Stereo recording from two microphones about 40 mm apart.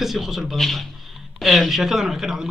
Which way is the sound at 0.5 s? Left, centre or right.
Centre.